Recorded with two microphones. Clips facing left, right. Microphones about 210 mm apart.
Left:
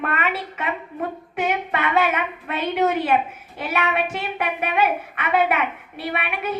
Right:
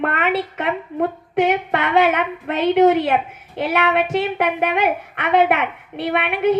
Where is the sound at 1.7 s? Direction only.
65° right (ahead or behind).